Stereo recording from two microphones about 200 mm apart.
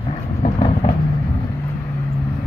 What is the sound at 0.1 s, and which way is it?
Vehicle, 30° left (ahead or behind).